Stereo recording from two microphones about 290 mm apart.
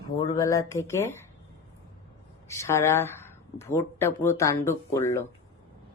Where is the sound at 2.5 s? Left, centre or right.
Centre.